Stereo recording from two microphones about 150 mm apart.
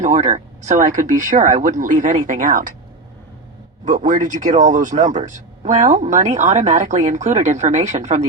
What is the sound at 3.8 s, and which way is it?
Speech, 60° right (ahead or behind).